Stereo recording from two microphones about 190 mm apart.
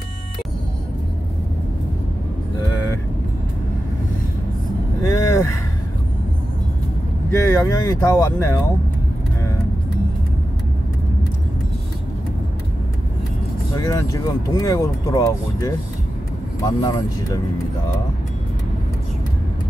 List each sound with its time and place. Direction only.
5.1 s vehicle: 15° left (ahead or behind)
7.2 s speech: 15° left (ahead or behind)
13.7 s speech: 15° left (ahead or behind)